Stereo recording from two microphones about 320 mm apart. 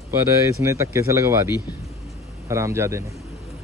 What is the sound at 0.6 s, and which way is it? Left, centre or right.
Speech, centre.